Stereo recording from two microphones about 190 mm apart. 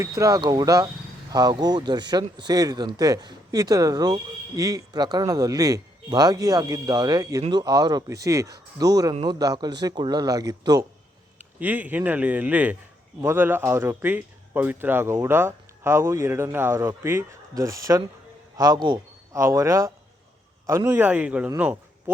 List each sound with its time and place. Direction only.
0.0 s speech: 15° right (ahead or behind)
11.6 s speech: 10° right (ahead or behind)